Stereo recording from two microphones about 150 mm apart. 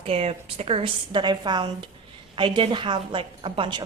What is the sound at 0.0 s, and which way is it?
A woman's voice, 40° right (ahead or behind).